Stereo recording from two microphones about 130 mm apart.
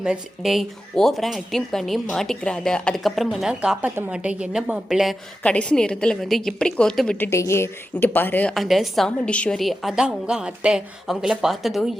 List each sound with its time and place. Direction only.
0.0 s speech: 5° right (ahead or behind)
5.4 s a woman's voice: 10° left (ahead or behind)
7.2 s a woman's voice: 20° left (ahead or behind)
8.5 s speech: centre (ahead or behind)